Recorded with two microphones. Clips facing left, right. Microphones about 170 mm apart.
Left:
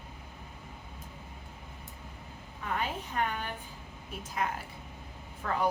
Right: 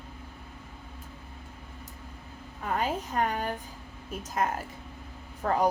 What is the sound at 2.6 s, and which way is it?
A woman's voice, 40° right (ahead or behind).